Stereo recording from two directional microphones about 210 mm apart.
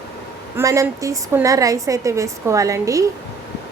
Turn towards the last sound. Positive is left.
turn(degrees=-15)  # may be behind; listen again after turning